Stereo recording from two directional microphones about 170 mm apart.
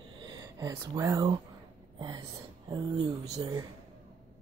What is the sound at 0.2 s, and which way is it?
Speech, 25° right (ahead or behind).